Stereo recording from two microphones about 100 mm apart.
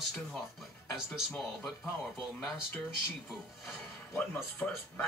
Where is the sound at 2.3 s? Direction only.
20° left (ahead or behind).